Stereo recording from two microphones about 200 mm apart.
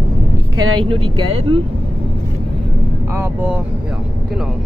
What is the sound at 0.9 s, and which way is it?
Speech, 25° right (ahead or behind).